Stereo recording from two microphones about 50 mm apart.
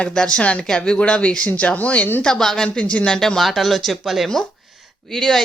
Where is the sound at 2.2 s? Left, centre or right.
Centre.